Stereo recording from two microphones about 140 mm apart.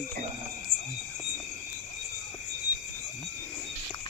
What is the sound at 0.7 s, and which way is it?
Cricket, 15° left (ahead or behind).